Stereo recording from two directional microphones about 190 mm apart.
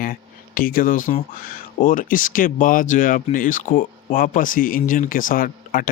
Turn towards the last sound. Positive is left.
turn(degrees=50)  # may be behind; listen again after turning